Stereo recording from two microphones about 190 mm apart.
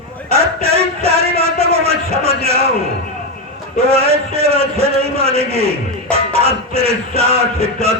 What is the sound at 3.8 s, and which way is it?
A man's voice, 30° right (ahead or behind).